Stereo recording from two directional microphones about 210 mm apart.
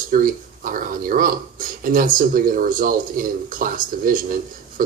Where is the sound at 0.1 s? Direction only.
40° right (ahead or behind).